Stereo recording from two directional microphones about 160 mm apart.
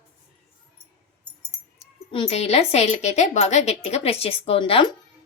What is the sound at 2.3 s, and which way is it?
A woman's voice, 40° left (ahead or behind).